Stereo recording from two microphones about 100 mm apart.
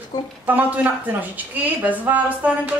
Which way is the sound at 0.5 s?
15° right (ahead or behind).